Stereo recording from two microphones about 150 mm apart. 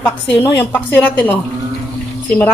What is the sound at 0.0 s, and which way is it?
Speech, 10° left (ahead or behind).